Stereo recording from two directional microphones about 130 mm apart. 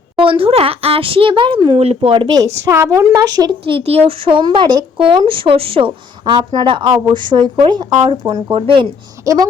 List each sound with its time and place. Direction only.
0.2 s speech: 45° right (ahead or behind)
2.4 s a woman's voice: 20° right (ahead or behind)
3.7 s speech: 50° right (ahead or behind)
9.2 s a woman's voice: 25° right (ahead or behind)